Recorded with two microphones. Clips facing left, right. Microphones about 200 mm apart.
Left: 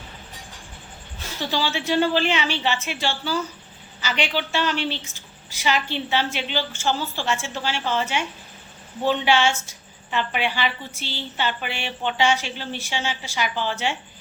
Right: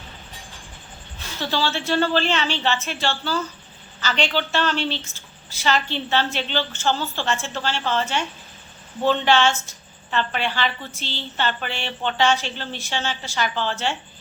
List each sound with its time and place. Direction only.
1.4 s a woman's voice: 15° left (ahead or behind)